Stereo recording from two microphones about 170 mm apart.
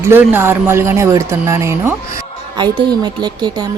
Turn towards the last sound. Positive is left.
turn(degrees=-25)  # may be behind; listen again after turning